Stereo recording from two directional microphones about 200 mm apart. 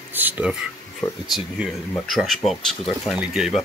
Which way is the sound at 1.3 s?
Centre (ahead or behind).